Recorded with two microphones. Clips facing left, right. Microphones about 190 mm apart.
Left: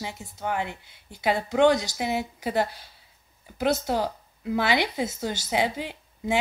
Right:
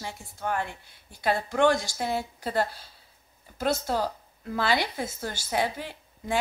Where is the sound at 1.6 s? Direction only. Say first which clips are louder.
Left 3 dB; 20° left (ahead or behind).